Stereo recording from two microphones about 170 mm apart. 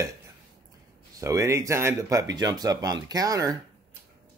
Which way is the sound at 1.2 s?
15° right (ahead or behind).